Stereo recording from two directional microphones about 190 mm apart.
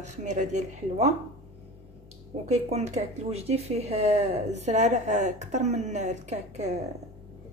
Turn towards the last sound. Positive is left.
turn(degrees=-35)  # may be behind; listen again after turning